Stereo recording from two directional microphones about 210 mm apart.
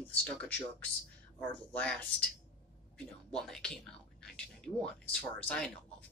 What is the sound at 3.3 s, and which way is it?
Speech, 5° left (ahead or behind).